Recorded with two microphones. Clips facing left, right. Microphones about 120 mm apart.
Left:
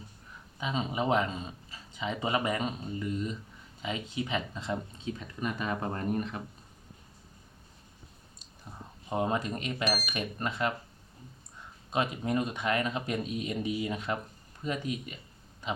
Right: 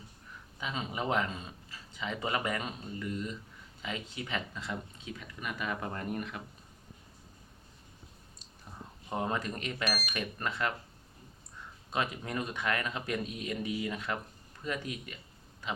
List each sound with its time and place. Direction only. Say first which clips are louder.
0.6 s speech: left 4 dB; 25° left (ahead or behind)
9.0 s speech: left 4 dB; 20° left (ahead or behind)
11.9 s speech: left 4 dB; 20° left (ahead or behind)